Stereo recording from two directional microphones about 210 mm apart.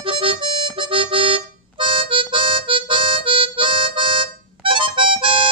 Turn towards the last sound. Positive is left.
turn(degrees=-25)  # may be behind; listen again after turning